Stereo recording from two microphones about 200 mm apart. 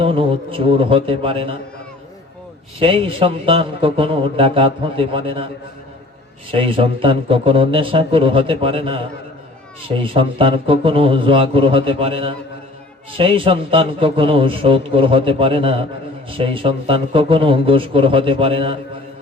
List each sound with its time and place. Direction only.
0.0 s a man's voice: 25° right (ahead or behind)
2.8 s a man's voice: 25° right (ahead or behind)
6.5 s a man's voice: 25° right (ahead or behind)